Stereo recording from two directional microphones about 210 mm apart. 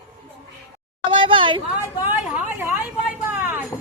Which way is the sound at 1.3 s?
25° right (ahead or behind).